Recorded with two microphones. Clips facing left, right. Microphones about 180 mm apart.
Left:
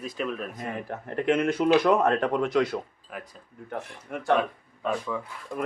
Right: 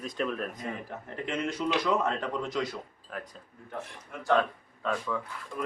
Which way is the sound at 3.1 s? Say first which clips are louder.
Even; 10° left (ahead or behind).